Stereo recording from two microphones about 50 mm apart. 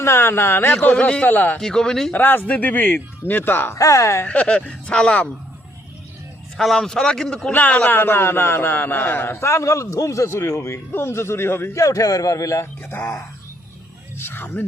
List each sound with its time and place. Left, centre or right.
0.0 s a man's voice: left
0.7 s speech: left
1.3 s speech: left
1.5 s a man's voice: centre
2.1 s speech: left
3.7 s a man's voice: left
4.3 s speech: left
6.7 s a man's voice: centre
7.5 s speech: left
7.9 s a man's voice: left
9.4 s a man's voice: left
10.9 s a man's voice: left
11.7 s a man's voice: left
14.2 s a sound: left